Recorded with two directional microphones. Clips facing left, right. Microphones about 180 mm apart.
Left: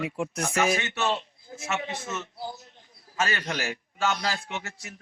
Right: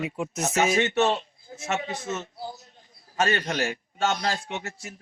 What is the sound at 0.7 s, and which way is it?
A man's voice, 35° right (ahead or behind).